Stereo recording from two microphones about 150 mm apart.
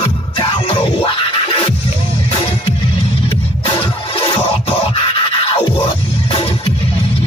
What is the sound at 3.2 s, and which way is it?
Music, 35° left (ahead or behind).